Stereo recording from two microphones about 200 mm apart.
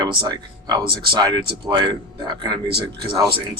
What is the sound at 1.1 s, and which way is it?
Speech, 20° right (ahead or behind).